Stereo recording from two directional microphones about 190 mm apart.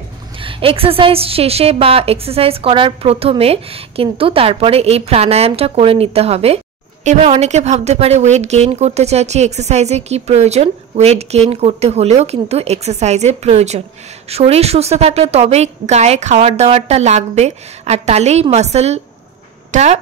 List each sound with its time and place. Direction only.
0.4 s a woman's voice: 30° right (ahead or behind)